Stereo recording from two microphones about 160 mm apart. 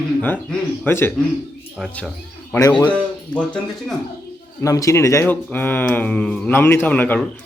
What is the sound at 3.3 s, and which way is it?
Speech, 5° left (ahead or behind).